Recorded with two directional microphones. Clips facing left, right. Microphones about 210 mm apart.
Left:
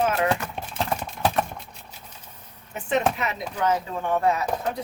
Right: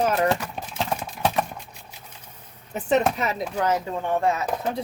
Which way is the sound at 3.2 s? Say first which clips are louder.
Right 2 dB; 40° right (ahead or behind).